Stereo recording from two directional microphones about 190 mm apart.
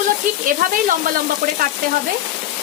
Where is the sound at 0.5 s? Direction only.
45° right (ahead or behind).